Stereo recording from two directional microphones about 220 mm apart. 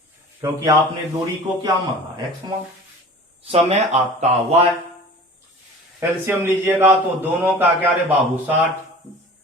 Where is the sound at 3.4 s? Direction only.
30° right (ahead or behind).